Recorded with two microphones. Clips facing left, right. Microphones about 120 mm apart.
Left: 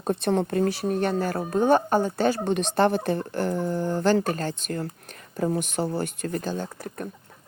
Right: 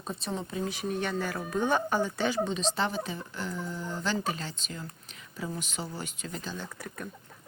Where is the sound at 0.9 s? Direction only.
45° left (ahead or behind).